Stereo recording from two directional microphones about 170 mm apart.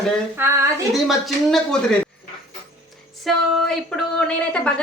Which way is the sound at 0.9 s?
Centre (ahead or behind).